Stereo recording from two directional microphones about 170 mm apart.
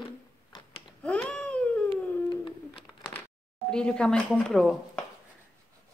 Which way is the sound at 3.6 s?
5° left (ahead or behind).